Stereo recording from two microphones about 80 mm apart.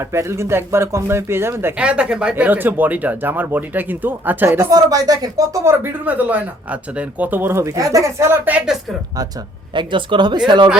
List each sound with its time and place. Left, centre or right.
0.0 s speech: right
1.8 s speech: centre
2.3 s speech: right
4.7 s speech: right
5.6 s speech: right
7.6 s speech: right
9.7 s speech: right